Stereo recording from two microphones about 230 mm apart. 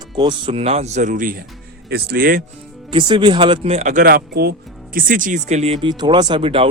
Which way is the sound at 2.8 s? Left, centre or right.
Right.